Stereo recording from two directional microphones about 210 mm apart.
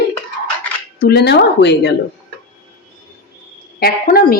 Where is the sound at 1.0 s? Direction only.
50° left (ahead or behind).